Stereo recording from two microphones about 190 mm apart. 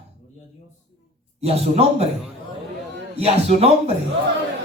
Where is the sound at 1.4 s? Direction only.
35° right (ahead or behind).